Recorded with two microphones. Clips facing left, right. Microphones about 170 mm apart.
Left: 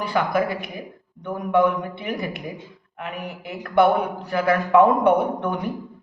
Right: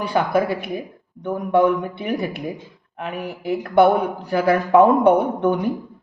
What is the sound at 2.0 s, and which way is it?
Speech, 35° right (ahead or behind).